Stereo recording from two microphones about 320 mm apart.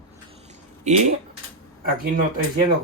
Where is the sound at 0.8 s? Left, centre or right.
Right.